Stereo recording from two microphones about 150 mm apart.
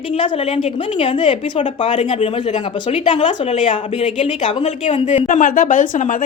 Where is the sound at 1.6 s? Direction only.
50° left (ahead or behind).